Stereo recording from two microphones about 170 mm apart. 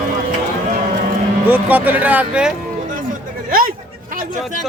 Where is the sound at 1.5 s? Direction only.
10° right (ahead or behind).